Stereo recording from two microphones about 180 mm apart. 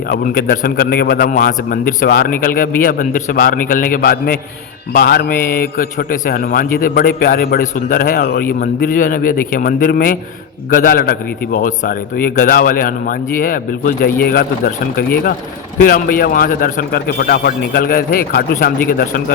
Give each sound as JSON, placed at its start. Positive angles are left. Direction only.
{"t": 0.1, "sound": "a man's voice", "side_deg": 55}